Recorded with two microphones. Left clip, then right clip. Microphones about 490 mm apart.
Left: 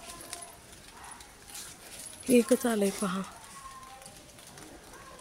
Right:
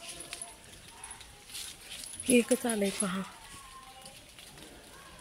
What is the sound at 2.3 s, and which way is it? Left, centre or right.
Speech, right.